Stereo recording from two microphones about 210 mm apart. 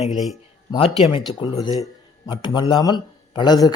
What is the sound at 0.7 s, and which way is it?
A man's voice, 25° left (ahead or behind).